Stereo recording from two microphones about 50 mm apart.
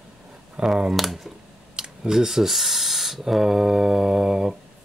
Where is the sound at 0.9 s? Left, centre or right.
Centre.